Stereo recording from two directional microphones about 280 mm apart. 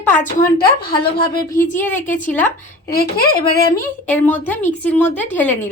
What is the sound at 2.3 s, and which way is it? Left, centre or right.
Speech, centre.